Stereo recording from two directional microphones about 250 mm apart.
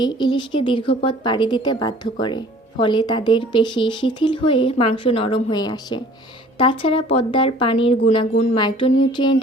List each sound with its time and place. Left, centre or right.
0.0 s a woman's voice: centre